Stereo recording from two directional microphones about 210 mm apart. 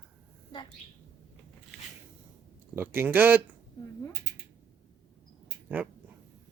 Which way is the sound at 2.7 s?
10° right (ahead or behind).